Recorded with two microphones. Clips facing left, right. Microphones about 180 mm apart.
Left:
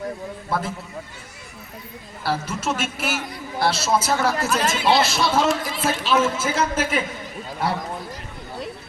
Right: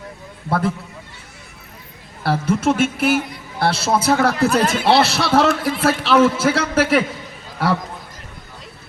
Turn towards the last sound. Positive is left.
turn(degrees=-70)  # may be behind; listen again after turning